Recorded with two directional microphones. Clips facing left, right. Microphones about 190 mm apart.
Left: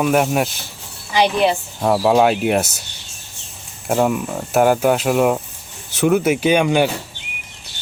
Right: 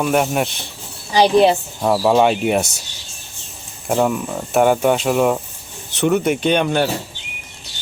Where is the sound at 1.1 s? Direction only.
35° right (ahead or behind).